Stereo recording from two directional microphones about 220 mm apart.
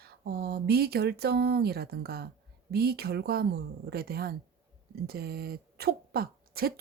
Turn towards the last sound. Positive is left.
turn(degrees=-45)  # may be behind; listen again after turning